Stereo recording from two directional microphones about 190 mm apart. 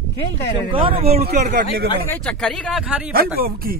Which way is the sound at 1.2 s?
55° right (ahead or behind).